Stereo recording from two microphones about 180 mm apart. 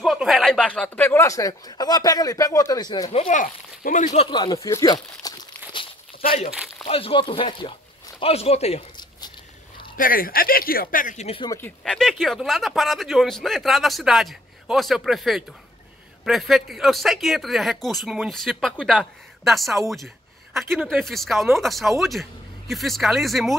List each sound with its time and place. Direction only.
0.0 s speech: centre (ahead or behind); by 3.1 s 20° left (ahead or behind)
3.1 s speech: 40° left (ahead or behind)
4.3 s speech: 25° left (ahead or behind)
6.9 s speech: 30° left (ahead or behind)
9.9 s speech: 50° left (ahead or behind); by 11.5 s 30° left (ahead or behind)
11.5 s speech: 10° left (ahead or behind)